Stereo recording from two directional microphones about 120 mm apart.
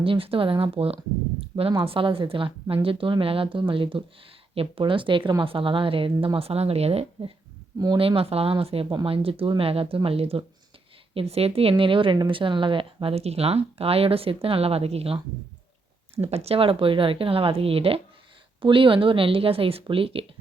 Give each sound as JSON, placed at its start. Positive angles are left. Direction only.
{"t": 0.0, "sound": "a woman's voice", "side_deg": -50}
{"t": 1.4, "sound": "a sound", "side_deg": -50}
{"t": 1.8, "sound": "a woman's voice", "side_deg": -50}
{"t": 16.2, "sound": "a woman's voice", "side_deg": -60}